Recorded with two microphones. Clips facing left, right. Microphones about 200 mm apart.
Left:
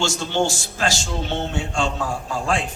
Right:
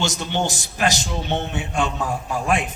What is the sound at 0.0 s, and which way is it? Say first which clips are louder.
A man's voice: left 2 dB; 20° right (ahead or behind).